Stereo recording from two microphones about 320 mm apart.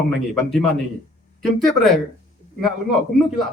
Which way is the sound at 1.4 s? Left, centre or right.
Centre.